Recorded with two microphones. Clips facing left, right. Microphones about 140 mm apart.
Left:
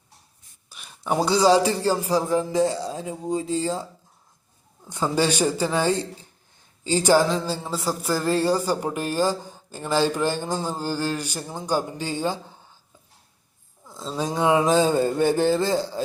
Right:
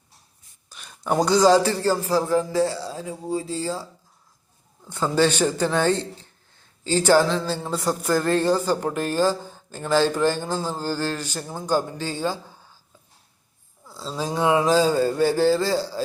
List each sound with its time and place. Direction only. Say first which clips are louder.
0.7 s speech: right 1 dB; 5° left (ahead or behind); by 3.4 s 20° left (ahead or behind)
3.4 s speech: left 4 dB; 35° right (ahead or behind)
4.9 s speech: right 2 dB; 15° left (ahead or behind)
13.9 s a sound: left 1 dB; centre (ahead or behind)
14.2 s a man's voice: even; 20° left (ahead or behind)